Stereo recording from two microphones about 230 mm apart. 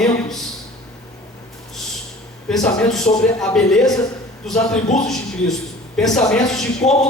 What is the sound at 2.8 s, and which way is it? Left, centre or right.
Speech, centre.